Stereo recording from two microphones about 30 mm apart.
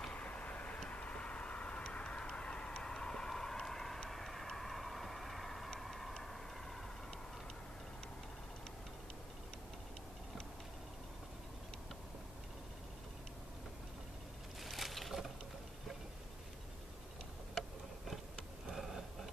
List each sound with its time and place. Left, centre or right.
0.1 s vehicle: left
0.8 s a sound: left
3.3 s vehicle: centre
5.8 s tick-tock: centre
14.6 s boat: centre
18.3 s a sound: centre